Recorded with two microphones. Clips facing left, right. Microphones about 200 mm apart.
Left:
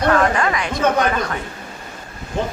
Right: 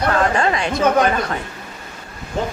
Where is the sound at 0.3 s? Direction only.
30° right (ahead or behind).